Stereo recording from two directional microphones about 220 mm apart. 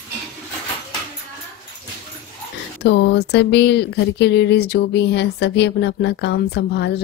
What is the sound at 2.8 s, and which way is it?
Speech, 50° left (ahead or behind).